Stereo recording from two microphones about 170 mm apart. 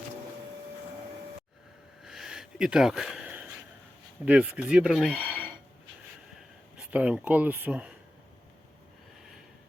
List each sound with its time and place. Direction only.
2.0 s a sound: centre (ahead or behind)
4.3 s speech: 5° right (ahead or behind)
6.7 s speech: 10° right (ahead or behind)